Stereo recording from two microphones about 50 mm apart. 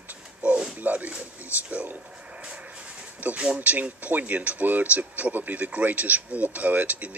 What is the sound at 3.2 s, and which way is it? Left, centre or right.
Speech, right.